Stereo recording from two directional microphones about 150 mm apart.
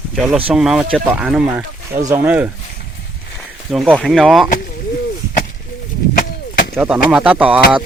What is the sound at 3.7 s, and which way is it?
Speech, centre (ahead or behind).